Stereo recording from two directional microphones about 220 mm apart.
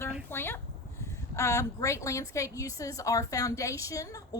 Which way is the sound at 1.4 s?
15° left (ahead or behind).